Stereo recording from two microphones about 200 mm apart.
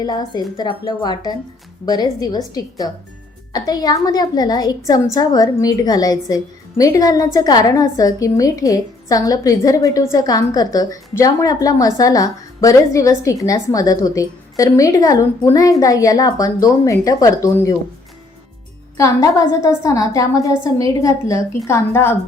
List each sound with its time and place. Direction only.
0.0 s a woman's voice: 20° left (ahead or behind)
18.9 s a woman's voice: 15° left (ahead or behind)